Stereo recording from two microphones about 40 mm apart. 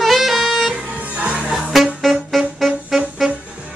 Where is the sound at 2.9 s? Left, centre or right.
Centre.